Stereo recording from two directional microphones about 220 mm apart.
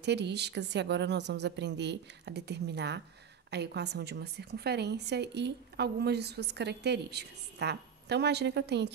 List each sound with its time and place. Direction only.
0.0 s a woman's voice: 50° right (ahead or behind)